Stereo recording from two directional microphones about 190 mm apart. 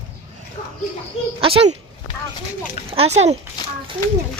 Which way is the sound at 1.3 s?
30° right (ahead or behind).